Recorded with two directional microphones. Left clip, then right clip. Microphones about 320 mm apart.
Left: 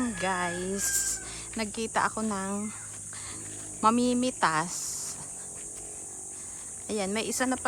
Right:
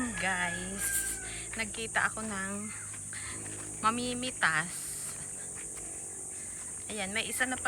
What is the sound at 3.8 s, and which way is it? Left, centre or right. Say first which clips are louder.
Speech: left 6 dB; centre.